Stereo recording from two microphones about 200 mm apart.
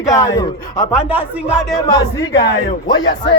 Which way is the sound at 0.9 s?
10° right (ahead or behind).